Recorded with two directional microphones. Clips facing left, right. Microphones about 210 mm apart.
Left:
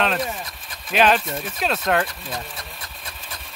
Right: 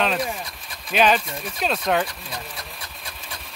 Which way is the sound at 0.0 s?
Centre (ahead or behind).